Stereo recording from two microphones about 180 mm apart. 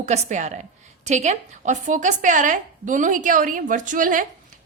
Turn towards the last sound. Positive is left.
turn(degrees=-50)  # may be behind; listen again after turning